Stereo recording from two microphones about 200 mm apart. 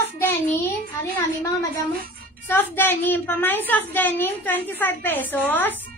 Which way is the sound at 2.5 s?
10° left (ahead or behind).